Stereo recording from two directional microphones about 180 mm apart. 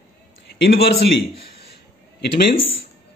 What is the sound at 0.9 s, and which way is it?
Speech, 70° left (ahead or behind).